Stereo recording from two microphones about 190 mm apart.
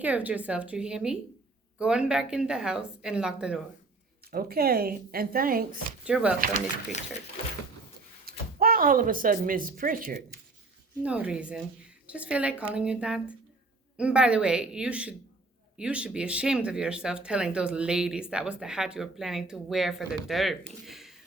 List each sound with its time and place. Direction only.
0.0 s a woman's voice: 10° right (ahead or behind)
4.3 s speech: 50° right (ahead or behind)
6.1 s a woman's voice: 5° right (ahead or behind)
6.5 s speech: 35° left (ahead or behind)
8.2 s speech: 50° right (ahead or behind)
11.0 s a woman's voice: 5° right (ahead or behind)
20.8 s a sound: centre (ahead or behind)